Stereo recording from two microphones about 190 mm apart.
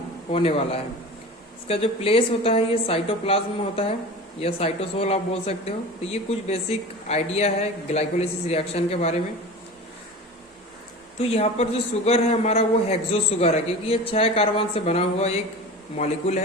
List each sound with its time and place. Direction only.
0.3 s speech: 30° left (ahead or behind)
11.2 s speech: 35° left (ahead or behind)